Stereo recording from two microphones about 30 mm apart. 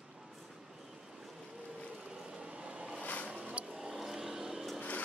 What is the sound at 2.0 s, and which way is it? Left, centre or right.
Boat, right.